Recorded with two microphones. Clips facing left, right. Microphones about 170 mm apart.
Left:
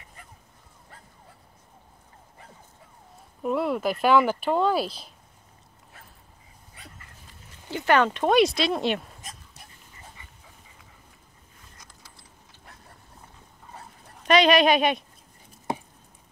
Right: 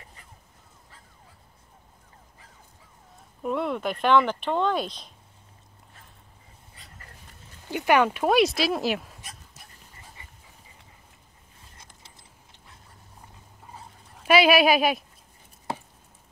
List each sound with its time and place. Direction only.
3.4 s speech: 5° left (ahead or behind)
7.7 s speech: 10° right (ahead or behind)
11.8 s a sound: 25° right (ahead or behind)
14.2 s speech: 5° right (ahead or behind)